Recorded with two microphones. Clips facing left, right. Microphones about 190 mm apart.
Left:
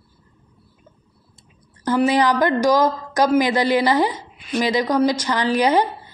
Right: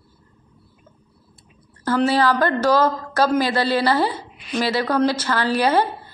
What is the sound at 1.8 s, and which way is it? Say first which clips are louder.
A woman's voice: left 1 dB; 15° left (ahead or behind).